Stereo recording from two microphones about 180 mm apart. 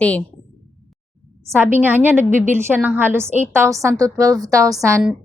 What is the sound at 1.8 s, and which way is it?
A woman's voice, 10° right (ahead or behind).